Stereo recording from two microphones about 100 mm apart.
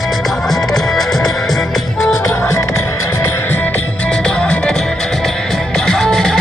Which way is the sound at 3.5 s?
20° left (ahead or behind).